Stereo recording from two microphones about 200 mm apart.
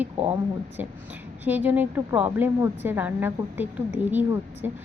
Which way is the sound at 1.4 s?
10° right (ahead or behind).